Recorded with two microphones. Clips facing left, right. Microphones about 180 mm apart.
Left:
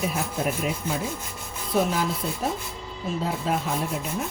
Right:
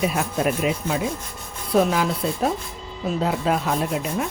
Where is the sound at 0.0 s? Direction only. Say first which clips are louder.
Right 5 dB; 90° right.